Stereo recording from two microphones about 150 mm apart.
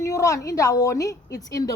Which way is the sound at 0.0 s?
20° left (ahead or behind).